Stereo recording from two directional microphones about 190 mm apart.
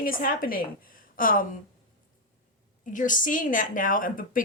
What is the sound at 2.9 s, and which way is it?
Speech, 45° left (ahead or behind).